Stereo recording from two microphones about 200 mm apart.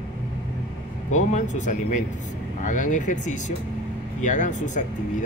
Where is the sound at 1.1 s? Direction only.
35° left (ahead or behind).